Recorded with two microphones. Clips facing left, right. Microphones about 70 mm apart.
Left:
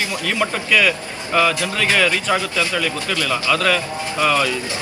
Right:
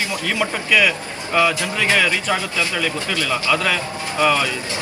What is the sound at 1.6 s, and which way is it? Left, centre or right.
A man's voice, right.